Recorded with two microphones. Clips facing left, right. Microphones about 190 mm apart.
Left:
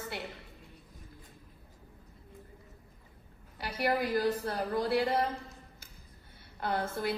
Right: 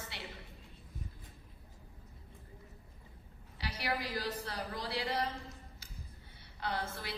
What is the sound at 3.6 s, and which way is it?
A woman's voice, 55° left (ahead or behind).